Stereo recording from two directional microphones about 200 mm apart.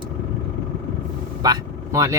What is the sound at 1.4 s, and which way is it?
Vehicle, 20° right (ahead or behind).